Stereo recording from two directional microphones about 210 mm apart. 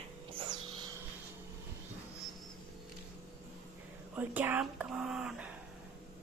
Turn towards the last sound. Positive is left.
turn(degrees=-5)  # may be behind; listen again after turning